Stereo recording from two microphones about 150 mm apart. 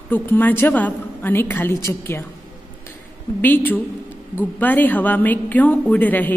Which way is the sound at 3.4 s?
10° left (ahead or behind).